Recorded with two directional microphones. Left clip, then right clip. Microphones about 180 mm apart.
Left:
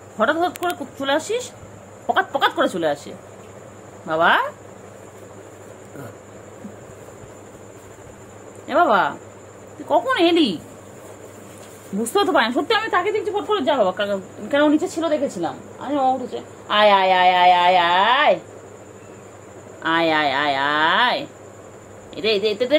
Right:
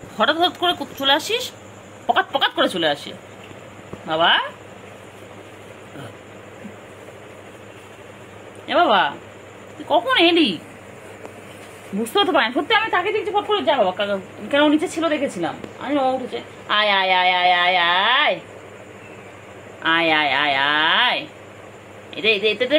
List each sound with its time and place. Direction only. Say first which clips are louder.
0.2 s a woman's voice: right 2 dB; 10° left (ahead or behind)
8.6 s a woman's voice: even; 10° left (ahead or behind)
12.0 s speech: even; 20° left (ahead or behind)
12.6 s a woman's voice: right 1 dB; 35° left (ahead or behind)
14.8 s a woman's voice: even; centre (ahead or behind)
19.8 s a woman's voice: right 1 dB; 10° left (ahead or behind)